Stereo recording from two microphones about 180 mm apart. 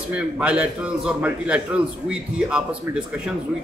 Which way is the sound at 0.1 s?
5° right (ahead or behind).